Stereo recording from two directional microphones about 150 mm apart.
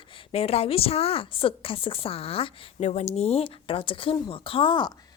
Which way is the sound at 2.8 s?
50° left (ahead or behind).